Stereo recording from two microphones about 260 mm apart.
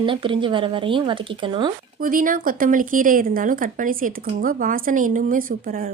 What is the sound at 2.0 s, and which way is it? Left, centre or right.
A woman's voice, right.